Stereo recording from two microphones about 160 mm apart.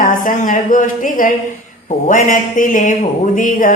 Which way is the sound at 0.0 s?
60° left (ahead or behind).